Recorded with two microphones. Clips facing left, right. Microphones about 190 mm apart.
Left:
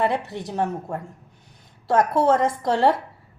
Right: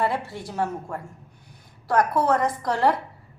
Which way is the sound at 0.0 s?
20° left (ahead or behind).